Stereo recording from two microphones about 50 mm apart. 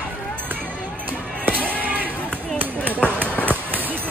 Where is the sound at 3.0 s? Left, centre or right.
Left.